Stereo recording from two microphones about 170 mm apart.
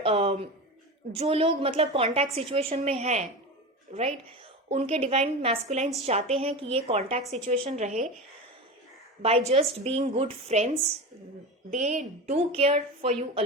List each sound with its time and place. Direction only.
0.0 s a woman's voice: 35° right (ahead or behind)
9.5 s a woman's voice: 35° right (ahead or behind)
11.7 s a woman's voice: 45° right (ahead or behind)